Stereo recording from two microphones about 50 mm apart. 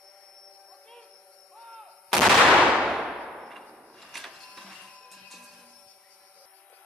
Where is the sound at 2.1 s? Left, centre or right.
Centre.